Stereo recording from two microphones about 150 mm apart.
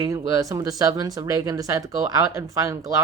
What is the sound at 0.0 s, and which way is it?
Speech, 20° right (ahead or behind).